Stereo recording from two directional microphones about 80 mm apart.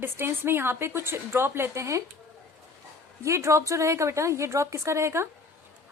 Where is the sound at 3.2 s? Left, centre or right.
Right.